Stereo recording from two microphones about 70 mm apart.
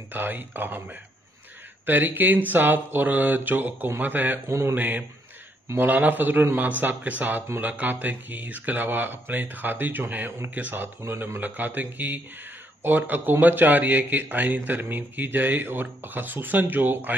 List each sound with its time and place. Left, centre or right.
0.1 s speech: right
4.5 s speech: right
4.7 s speech: right
11.0 s speech: right